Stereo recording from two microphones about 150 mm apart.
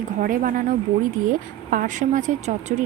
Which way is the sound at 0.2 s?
65° right (ahead or behind).